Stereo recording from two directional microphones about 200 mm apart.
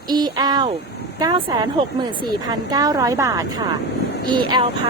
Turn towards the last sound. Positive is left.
turn(degrees=-20)  # may be behind; listen again after turning